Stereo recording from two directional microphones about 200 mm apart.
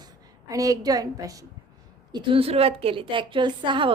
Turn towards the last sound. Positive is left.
turn(degrees=-25)  # may be behind; listen again after turning